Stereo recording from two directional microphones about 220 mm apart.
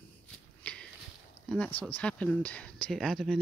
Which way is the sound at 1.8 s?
5° left (ahead or behind).